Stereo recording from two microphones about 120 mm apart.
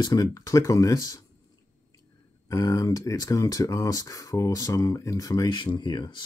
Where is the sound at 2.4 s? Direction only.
30° left (ahead or behind).